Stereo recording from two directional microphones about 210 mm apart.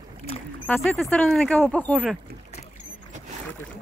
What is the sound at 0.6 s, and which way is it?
Speech, 10° left (ahead or behind).